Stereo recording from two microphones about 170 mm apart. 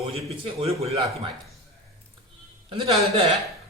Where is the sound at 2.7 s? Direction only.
35° right (ahead or behind).